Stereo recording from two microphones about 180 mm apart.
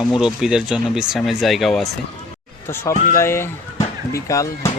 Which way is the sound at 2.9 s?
50° left (ahead or behind).